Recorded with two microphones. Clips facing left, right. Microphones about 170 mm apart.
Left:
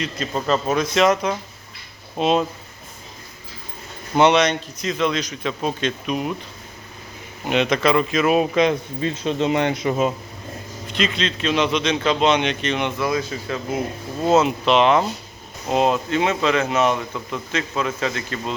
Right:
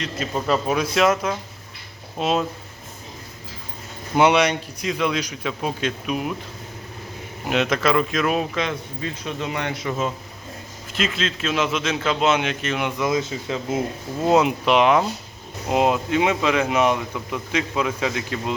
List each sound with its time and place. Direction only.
0.0 s a man's voice: 5° right (ahead or behind)
4.2 s speech: 10° right (ahead or behind)
7.5 s a man's voice: centre (ahead or behind)
8.4 s a man's voice: 20° left (ahead or behind)
10.8 s a man's voice: 5° right (ahead or behind)
13.0 s speech: 20° right (ahead or behind)